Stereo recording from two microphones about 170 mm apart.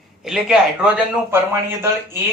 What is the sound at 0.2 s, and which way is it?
Speech, 5° right (ahead or behind).